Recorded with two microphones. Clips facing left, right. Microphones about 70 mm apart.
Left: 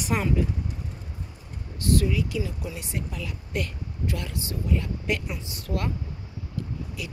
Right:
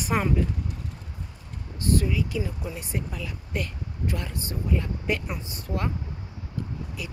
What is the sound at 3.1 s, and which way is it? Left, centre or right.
Speech, centre.